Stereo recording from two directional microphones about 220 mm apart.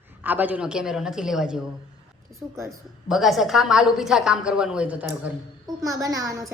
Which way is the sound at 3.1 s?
Centre (ahead or behind).